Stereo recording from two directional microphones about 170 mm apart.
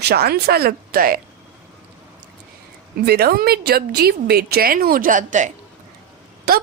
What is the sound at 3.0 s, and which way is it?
A woman's voice, 65° right (ahead or behind).